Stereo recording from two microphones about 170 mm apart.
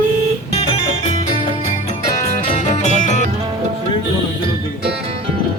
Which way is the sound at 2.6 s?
45° left (ahead or behind).